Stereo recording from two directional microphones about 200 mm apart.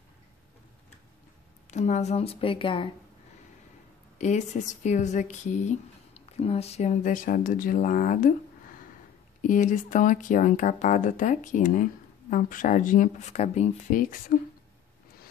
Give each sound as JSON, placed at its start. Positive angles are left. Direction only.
{"t": 1.7, "sound": "a woman's voice", "side_deg": 35}
{"t": 4.2, "sound": "a woman's voice", "side_deg": 35}
{"t": 14.3, "sound": "speech", "side_deg": 45}